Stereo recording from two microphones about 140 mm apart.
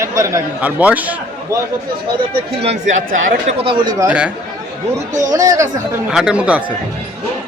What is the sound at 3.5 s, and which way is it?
Speech, 40° right (ahead or behind).